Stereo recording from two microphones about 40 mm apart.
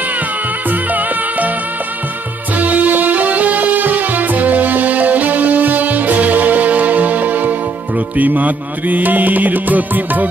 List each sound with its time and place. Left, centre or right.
0.7 s music: right
2.5 s music: right